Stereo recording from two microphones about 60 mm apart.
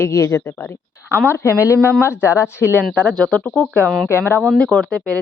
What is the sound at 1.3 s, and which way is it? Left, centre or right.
Speech, left.